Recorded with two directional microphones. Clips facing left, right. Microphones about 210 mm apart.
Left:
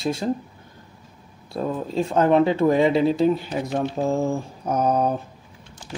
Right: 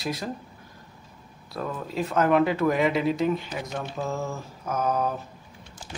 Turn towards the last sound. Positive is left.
turn(degrees=35)  # may be behind; listen again after turning